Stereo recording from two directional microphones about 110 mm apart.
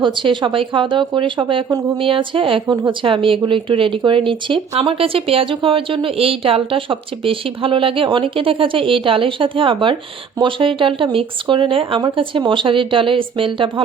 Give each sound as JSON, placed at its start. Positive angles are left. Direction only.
{"t": 0.0, "sound": "speech", "side_deg": -45}